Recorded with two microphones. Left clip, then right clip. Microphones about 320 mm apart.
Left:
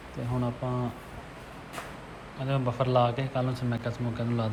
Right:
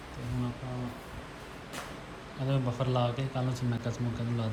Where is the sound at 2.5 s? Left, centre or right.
Centre.